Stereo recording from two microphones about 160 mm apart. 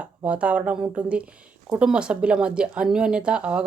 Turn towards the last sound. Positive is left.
turn(degrees=-5)  # may be behind; listen again after turning